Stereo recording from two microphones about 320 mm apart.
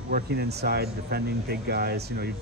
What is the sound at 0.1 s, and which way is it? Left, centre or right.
Speech, right.